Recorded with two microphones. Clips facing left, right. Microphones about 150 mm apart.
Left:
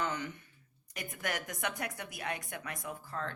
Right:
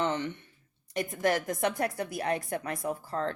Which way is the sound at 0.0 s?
25° right (ahead or behind).